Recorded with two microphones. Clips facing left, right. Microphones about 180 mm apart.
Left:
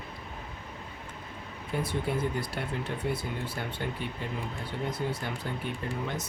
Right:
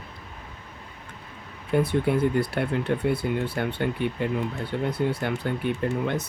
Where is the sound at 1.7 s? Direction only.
60° right (ahead or behind).